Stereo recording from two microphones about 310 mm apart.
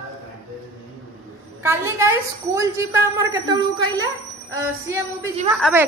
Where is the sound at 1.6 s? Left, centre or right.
Centre.